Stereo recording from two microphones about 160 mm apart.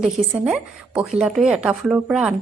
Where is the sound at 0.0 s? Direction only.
Centre (ahead or behind).